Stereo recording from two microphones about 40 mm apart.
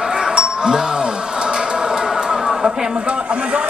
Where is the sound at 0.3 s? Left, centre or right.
Right.